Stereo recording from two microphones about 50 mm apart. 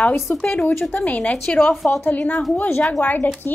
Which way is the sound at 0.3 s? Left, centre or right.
Left.